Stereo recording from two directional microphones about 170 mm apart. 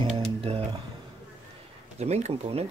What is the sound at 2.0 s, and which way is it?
Speech, 40° right (ahead or behind).